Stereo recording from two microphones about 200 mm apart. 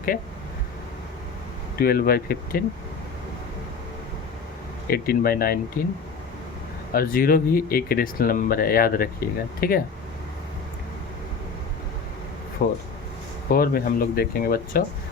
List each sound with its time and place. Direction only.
1.8 s speech: 50° left (ahead or behind)
4.9 s speech: 50° left (ahead or behind)
6.9 s speech: 45° left (ahead or behind)
12.6 s speech: 45° left (ahead or behind)